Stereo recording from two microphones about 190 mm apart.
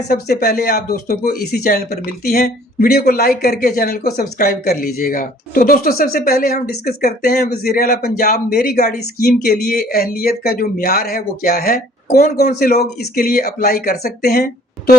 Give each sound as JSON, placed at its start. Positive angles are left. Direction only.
{"t": 0.1, "sound": "speech", "side_deg": 55}